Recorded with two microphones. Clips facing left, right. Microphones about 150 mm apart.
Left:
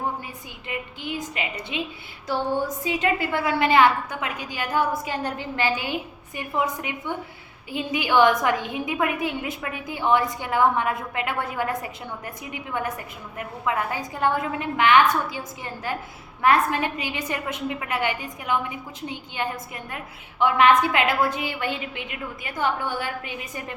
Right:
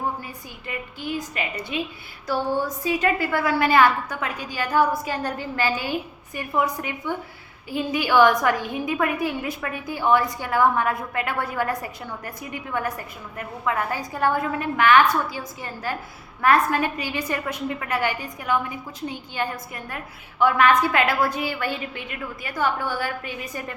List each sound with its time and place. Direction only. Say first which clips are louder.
0.7 s a woman's voice: right 1 dB; 20° left (ahead or behind)
2.8 s a woman's voice: right 1 dB; 20° left (ahead or behind)